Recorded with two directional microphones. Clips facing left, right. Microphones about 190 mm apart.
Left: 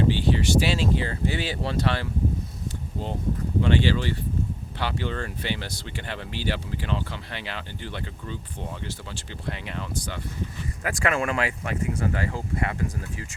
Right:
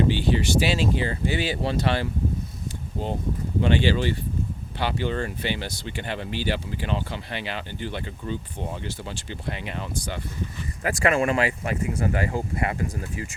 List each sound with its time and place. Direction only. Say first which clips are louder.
0.1 s speech: even; 15° right (ahead or behind)
3.6 s speech: right 2 dB; 15° right (ahead or behind)